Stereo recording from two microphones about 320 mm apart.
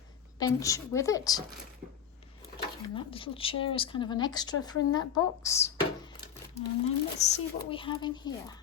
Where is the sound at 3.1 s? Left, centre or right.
Centre.